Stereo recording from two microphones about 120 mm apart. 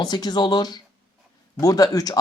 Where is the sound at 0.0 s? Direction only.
35° left (ahead or behind).